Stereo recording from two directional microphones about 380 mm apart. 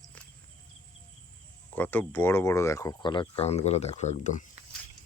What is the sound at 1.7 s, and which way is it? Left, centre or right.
Speech, centre.